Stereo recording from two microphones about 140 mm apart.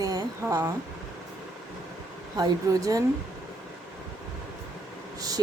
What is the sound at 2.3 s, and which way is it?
Speech, 25° right (ahead or behind).